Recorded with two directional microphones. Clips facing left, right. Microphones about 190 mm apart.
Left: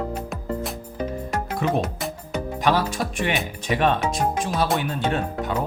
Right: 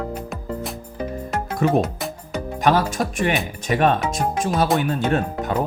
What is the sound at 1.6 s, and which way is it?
Speech, 45° right (ahead or behind).